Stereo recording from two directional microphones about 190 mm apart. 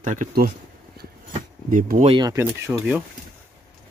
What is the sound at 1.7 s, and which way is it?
Speech, 45° right (ahead or behind).